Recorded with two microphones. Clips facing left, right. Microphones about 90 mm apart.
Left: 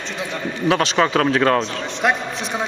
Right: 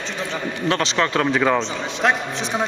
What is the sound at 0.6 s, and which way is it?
A man's voice, 10° left (ahead or behind).